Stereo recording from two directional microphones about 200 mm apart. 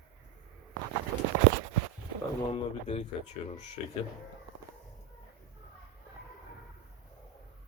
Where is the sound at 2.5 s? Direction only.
30° left (ahead or behind).